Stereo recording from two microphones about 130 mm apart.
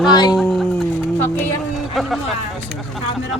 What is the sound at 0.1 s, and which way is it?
Speech, 35° left (ahead or behind).